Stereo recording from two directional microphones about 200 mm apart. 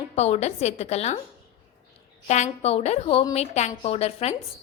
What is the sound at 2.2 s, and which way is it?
A woman's voice, 35° left (ahead or behind).